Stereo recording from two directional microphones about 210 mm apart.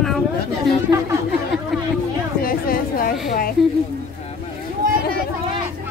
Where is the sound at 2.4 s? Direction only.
45° left (ahead or behind).